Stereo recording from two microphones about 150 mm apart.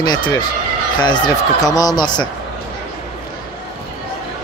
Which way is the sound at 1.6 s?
25° left (ahead or behind).